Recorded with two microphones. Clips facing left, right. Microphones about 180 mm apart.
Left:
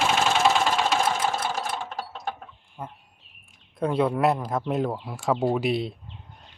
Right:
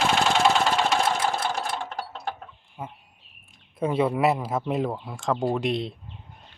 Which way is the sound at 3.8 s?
5° right (ahead or behind).